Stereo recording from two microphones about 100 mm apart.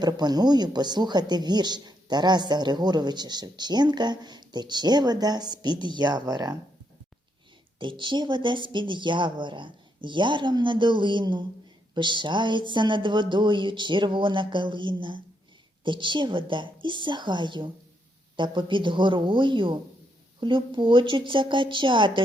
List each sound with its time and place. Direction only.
0.0 s speech: 45° right (ahead or behind)
7.8 s a woman's voice: 55° right (ahead or behind)